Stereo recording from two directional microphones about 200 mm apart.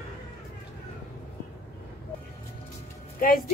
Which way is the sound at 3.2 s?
45° left (ahead or behind).